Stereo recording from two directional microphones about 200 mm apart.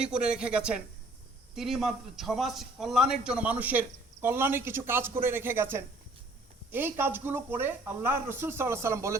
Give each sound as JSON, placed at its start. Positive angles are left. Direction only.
{"t": 0.0, "sound": "a man's voice", "side_deg": -5}